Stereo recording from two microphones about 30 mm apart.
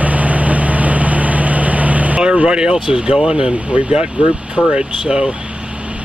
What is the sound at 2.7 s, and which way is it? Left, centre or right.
Speech, right.